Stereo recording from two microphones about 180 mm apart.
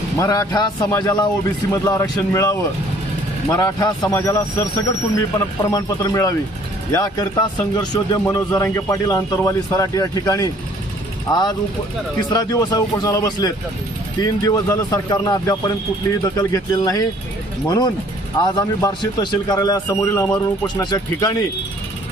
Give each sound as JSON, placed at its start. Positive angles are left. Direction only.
{"t": 0.2, "sound": "a man's voice", "side_deg": 20}